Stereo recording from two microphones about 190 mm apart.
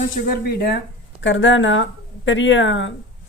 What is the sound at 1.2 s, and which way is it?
A woman's voice, 80° left.